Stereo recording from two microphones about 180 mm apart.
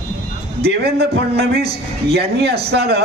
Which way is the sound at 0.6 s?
65° right (ahead or behind).